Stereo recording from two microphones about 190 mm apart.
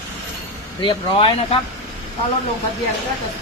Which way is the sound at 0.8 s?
25° left (ahead or behind).